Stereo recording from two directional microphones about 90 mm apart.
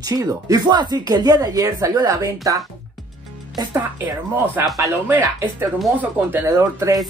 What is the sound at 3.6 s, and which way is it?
Speech, 50° right (ahead or behind).